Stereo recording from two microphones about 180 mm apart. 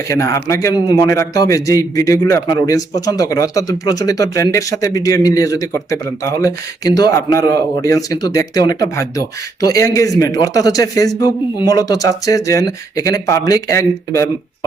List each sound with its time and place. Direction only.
0.1 s a man's voice: 15° left (ahead or behind)